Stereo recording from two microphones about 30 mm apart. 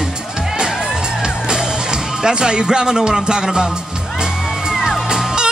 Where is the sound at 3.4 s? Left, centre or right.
Centre.